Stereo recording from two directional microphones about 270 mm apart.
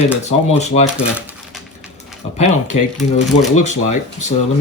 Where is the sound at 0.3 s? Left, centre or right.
Left.